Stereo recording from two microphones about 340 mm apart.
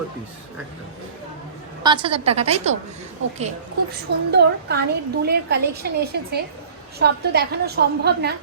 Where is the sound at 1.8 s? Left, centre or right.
Centre.